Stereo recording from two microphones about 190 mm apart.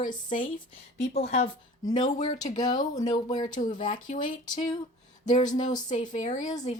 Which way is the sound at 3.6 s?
45° left (ahead or behind).